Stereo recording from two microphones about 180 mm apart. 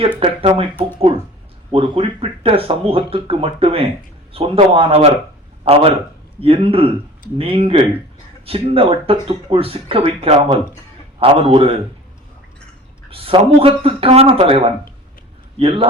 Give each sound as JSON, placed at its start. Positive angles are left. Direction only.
{"t": 0.2, "sound": "speech", "side_deg": -30}
{"t": 13.1, "sound": "speech", "side_deg": -30}